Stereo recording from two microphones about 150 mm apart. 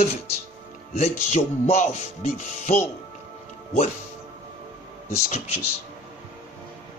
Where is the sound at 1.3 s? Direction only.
45° left (ahead or behind).